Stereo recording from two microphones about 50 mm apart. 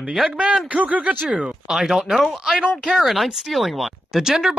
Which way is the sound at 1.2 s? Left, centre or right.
Centre.